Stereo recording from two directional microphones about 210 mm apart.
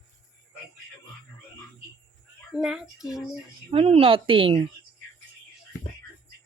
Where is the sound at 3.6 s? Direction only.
30° right (ahead or behind).